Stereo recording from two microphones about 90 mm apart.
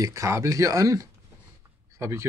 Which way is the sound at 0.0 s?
35° right (ahead or behind).